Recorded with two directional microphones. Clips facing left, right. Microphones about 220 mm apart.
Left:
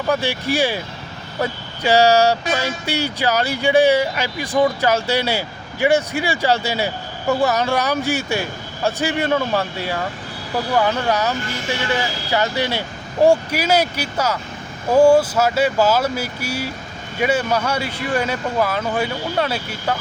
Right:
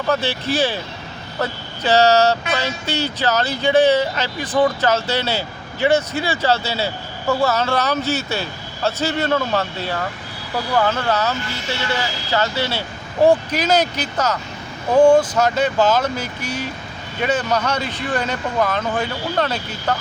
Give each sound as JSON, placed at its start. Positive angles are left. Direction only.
{"t": 0.1, "sound": "speech", "side_deg": 15}